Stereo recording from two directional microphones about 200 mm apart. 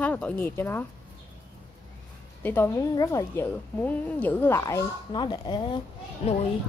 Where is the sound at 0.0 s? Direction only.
10° left (ahead or behind).